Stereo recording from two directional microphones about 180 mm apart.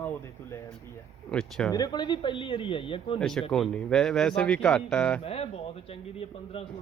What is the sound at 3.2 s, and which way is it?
Speech, centre (ahead or behind).